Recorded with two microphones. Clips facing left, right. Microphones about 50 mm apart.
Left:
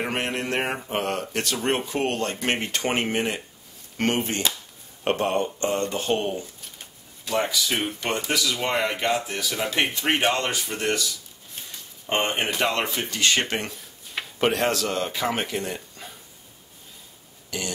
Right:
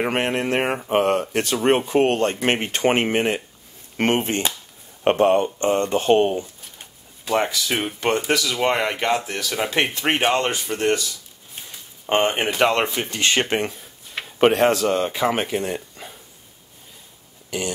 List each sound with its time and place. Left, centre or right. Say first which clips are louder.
0.0 s speech: right 5 dB; right
7.6 s speech: right 4 dB; right
12.1 s speech: right 5 dB; right
17.5 s speech: right 5 dB; right